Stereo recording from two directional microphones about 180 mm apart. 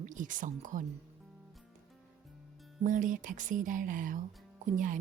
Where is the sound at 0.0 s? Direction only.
45° right (ahead or behind).